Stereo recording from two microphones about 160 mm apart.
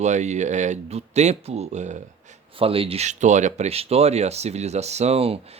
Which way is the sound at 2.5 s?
35° right (ahead or behind).